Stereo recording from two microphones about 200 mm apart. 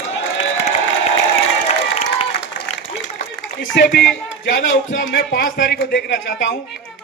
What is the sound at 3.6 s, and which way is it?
A man's voice, 65° left (ahead or behind).